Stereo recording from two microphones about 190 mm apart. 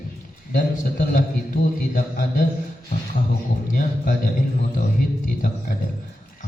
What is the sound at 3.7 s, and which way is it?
Speech, 45° left (ahead or behind).